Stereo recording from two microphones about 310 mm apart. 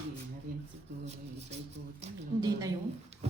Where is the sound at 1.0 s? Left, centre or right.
Right.